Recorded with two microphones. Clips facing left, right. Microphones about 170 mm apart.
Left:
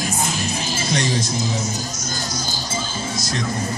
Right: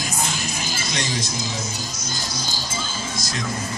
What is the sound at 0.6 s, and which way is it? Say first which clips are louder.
Music: left 7 dB; 30° left (ahead or behind).